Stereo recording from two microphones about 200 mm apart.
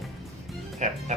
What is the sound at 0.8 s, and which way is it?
Music, 35° right (ahead or behind).